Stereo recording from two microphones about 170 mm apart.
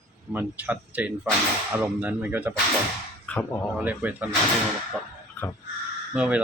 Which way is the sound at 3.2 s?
10° left (ahead or behind).